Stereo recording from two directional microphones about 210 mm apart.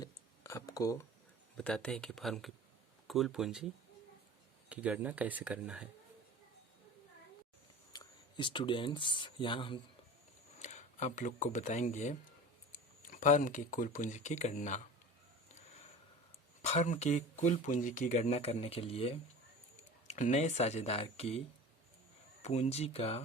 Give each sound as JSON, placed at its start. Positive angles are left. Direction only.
{"t": 0.0, "sound": "a sound", "side_deg": 15}
{"t": 1.5, "sound": "speech", "side_deg": 5}
{"t": 4.7, "sound": "speech", "side_deg": -5}
{"t": 7.9, "sound": "speech", "side_deg": 20}
{"t": 10.6, "sound": "speech", "side_deg": 35}
{"t": 16.6, "sound": "speech", "side_deg": 35}